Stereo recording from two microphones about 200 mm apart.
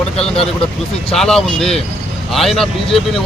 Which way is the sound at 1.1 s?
Centre (ahead or behind).